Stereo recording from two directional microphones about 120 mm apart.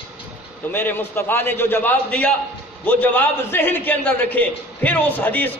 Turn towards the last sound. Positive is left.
turn(degrees=15)  # may be behind; listen again after turning